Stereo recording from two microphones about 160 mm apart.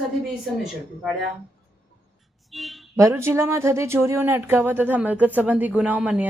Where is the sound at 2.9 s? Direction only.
15° right (ahead or behind).